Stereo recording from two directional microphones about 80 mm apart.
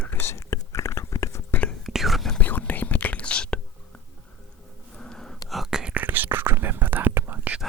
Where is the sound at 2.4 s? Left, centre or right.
Left.